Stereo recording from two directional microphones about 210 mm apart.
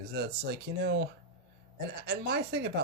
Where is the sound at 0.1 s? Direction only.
50° right (ahead or behind).